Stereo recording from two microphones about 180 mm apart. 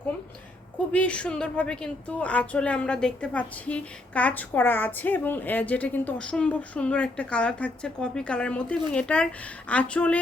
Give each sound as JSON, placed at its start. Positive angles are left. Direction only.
{"t": 0.9, "sound": "a woman's voice", "side_deg": 5}